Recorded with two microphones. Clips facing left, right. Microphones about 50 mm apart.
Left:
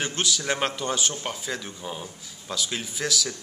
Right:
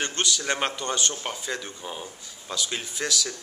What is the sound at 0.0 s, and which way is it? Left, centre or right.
Speech, centre.